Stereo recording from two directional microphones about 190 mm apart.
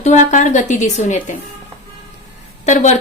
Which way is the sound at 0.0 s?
40° left (ahead or behind).